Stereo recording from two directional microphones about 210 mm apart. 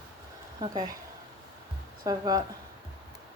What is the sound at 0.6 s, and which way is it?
Speech, 20° right (ahead or behind).